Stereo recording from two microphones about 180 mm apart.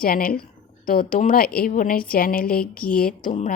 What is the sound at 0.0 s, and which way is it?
Speech, 50° left (ahead or behind).